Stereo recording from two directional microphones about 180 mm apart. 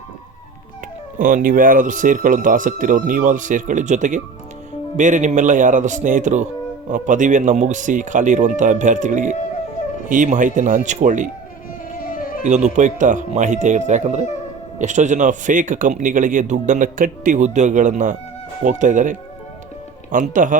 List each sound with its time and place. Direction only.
1.2 s a man's voice: 45° right (ahead or behind)
11.9 s music: 50° left (ahead or behind)
12.5 s a man's voice: 40° right (ahead or behind)
20.3 s a man's voice: 45° right (ahead or behind)